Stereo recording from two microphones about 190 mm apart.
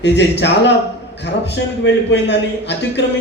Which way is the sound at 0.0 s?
65° left (ahead or behind).